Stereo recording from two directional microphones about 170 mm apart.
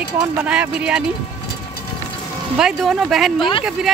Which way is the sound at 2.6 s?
Centre (ahead or behind).